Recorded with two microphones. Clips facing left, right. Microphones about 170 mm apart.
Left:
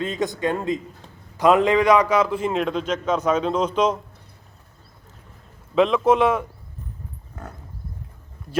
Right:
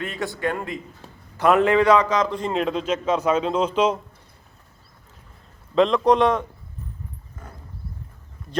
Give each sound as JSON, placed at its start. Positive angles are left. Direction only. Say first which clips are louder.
{"t": 0.0, "sound": "a man's voice", "louder": "left 3 dB", "side_deg": 20}
{"t": 5.7, "sound": "a man's voice", "louder": "even", "side_deg": 5}
{"t": 7.4, "sound": "dog", "louder": "left 6 dB", "side_deg": 70}